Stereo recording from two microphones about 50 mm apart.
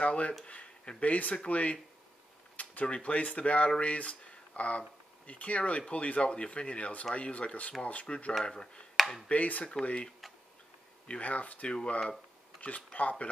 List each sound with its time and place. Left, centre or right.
0.0 s speech: left
8.9 s chop: centre
9.3 s speech: left
11.1 s speech: left